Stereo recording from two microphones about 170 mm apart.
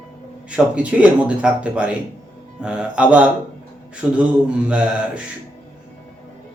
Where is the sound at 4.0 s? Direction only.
5° right (ahead or behind).